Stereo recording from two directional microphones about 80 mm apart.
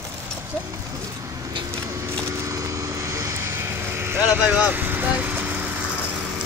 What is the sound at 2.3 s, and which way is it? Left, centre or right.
Vehicle, right.